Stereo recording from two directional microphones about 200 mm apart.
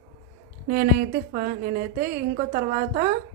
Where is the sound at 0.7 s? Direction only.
40° right (ahead or behind).